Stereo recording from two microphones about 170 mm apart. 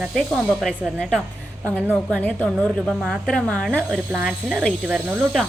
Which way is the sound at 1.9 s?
5° left (ahead or behind).